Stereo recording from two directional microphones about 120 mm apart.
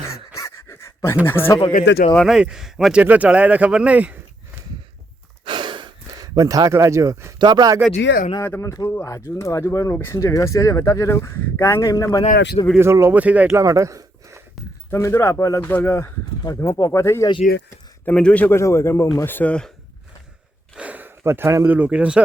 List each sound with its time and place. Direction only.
0.3 s pant: 25° left (ahead or behind)
1.5 s speech: 45° left (ahead or behind)
2.2 s speech: 5° right (ahead or behind)
3.0 s speech: 10° right (ahead or behind)
5.5 s gasp: 40° right (ahead or behind)
7.3 s speech: 35° right (ahead or behind)
8.4 s speech: 20° left (ahead or behind)
12.8 s speech: 20° right (ahead or behind)
13.6 s a sound: 25° right (ahead or behind)
14.8 s speech: 25° left (ahead or behind)
15.6 s speech: 15° left (ahead or behind)
16.4 s speech: 30° left (ahead or behind)
18.0 s a man's voice: 10° left (ahead or behind)
20.7 s speech: 10° right (ahead or behind)